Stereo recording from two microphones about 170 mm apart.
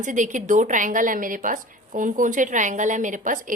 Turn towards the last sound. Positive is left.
turn(degrees=-50)  # may be behind; listen again after turning